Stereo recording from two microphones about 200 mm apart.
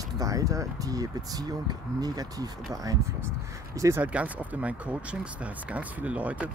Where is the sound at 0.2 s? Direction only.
15° right (ahead or behind).